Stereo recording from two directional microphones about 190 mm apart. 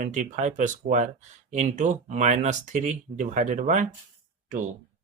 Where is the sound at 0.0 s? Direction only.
40° right (ahead or behind).